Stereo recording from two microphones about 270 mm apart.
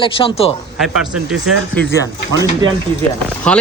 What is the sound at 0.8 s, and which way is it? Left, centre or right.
Speech, centre.